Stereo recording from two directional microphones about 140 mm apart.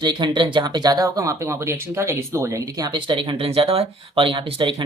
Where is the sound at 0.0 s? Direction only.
35° right (ahead or behind).